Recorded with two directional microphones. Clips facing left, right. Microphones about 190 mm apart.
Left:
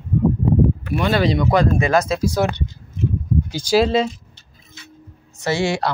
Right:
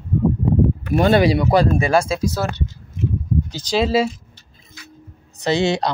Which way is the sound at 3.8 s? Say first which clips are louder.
Right 4 dB; 5° right (ahead or behind).